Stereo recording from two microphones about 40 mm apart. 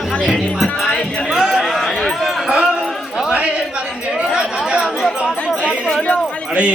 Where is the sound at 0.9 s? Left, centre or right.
Centre.